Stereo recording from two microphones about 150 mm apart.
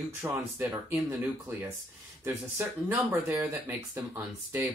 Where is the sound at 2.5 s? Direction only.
15° right (ahead or behind).